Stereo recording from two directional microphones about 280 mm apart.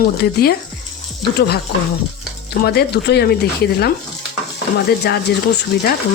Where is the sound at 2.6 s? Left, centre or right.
Left.